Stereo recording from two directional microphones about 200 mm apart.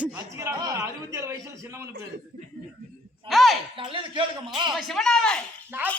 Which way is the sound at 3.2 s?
Centre (ahead or behind).